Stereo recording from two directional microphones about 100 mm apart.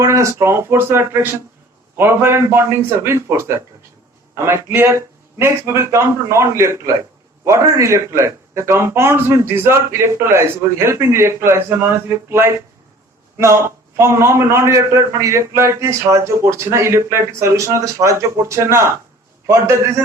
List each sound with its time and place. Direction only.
0.0 s a man's voice: 30° right (ahead or behind)